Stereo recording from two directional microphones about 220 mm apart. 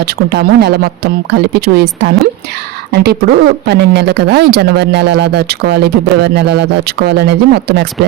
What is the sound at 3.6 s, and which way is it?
A woman's voice, 50° right (ahead or behind).